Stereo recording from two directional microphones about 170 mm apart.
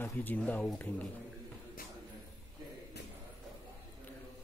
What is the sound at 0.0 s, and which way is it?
Speech, 10° left (ahead or behind).